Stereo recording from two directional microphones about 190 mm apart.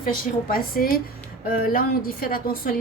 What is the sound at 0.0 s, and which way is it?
A woman's voice, 50° left (ahead or behind).